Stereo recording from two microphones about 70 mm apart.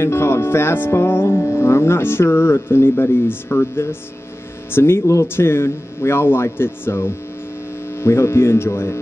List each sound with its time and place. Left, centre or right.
0.0 s speech: left